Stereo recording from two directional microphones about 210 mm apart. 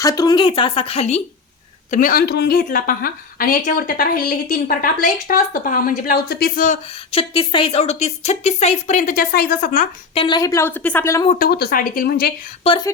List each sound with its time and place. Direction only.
0.0 s speech: 15° left (ahead or behind)
1.9 s a woman's voice: 40° left (ahead or behind)
7.1 s speech: 25° left (ahead or behind); by 9.8 s 40° left (ahead or behind)
10.2 s speech: 20° left (ahead or behind)
11.3 s a woman's voice: 45° left (ahead or behind)
12.6 s speech: 25° left (ahead or behind)